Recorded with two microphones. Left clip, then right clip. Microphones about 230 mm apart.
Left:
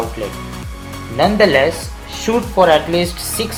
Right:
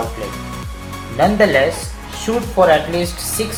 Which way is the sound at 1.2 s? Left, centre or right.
Left.